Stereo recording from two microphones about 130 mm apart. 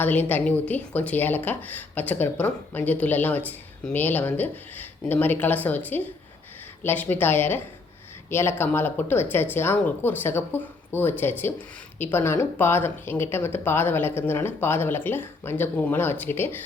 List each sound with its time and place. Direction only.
0.0 s speech: 15° left (ahead or behind)